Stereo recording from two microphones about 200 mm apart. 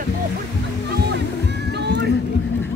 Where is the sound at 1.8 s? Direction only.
55° right (ahead or behind).